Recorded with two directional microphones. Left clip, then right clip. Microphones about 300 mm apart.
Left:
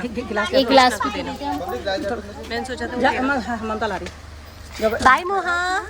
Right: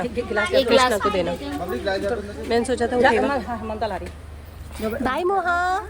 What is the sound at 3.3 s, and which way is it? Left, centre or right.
Speech, left.